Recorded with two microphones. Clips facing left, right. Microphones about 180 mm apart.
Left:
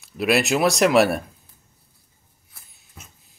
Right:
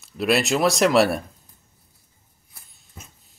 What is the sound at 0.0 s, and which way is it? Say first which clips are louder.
Speech: left 1 dB; centre (ahead or behind).